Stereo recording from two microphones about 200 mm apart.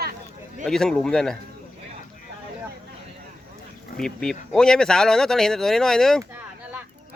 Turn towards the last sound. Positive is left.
turn(degrees=0)  # may be behind; listen again after turning